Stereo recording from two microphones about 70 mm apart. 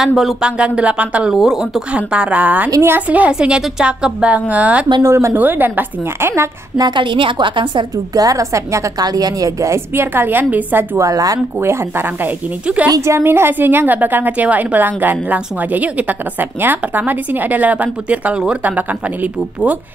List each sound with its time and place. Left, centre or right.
0.0 s speech: centre
0.6 s a woman's voice: centre
1.3 s speech: centre
2.0 s a woman's voice: centre
5.0 s speech: right
5.3 s a woman's voice: right
8.1 s a woman's voice: right
9.0 s speech: right
9.9 s a woman's voice: right
11.0 s speech: right
12.6 s a woman's voice: centre
13.0 s a woman's voice: right; by 18.4 s centre